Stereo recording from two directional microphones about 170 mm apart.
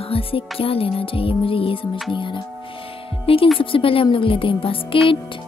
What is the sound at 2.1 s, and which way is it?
Speech, 30° left (ahead or behind).